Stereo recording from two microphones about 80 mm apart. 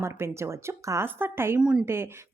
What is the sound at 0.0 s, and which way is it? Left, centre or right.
Speech, right.